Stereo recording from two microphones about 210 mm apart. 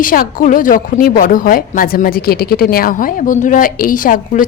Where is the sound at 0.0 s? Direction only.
40° left (ahead or behind).